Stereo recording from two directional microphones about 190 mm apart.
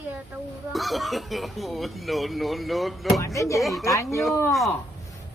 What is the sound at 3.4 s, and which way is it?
Speech, 15° left (ahead or behind).